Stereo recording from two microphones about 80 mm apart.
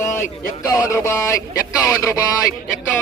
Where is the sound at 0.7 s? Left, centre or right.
Left.